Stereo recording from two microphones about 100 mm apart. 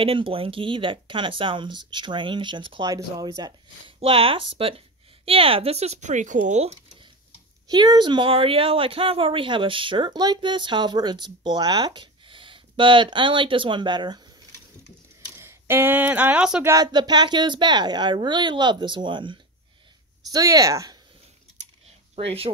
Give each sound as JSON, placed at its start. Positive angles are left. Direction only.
{"t": 0.0, "sound": "speech", "side_deg": -65}
{"t": 2.8, "sound": "speech", "side_deg": -35}
{"t": 4.0, "sound": "a woman's voice", "side_deg": -70}
{"t": 7.7, "sound": "speech", "side_deg": -45}
{"t": 15.3, "sound": "speech", "side_deg": -25}
{"t": 16.6, "sound": "speech", "side_deg": -40}
{"t": 20.2, "sound": "speech", "side_deg": -40}
{"t": 22.1, "sound": "speech", "side_deg": -80}